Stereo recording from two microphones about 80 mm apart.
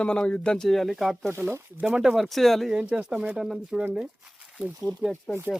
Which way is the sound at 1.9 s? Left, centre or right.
Centre.